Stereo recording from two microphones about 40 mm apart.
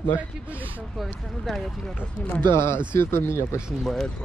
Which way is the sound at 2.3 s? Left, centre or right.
Left.